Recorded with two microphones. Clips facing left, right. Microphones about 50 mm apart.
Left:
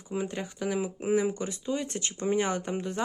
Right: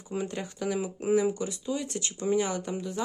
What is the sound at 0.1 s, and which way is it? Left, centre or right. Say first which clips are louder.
Speech: even; centre.